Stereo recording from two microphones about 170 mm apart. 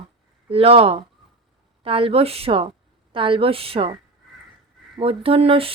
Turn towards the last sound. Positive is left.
turn(degrees=-35)  # may be behind; listen again after turning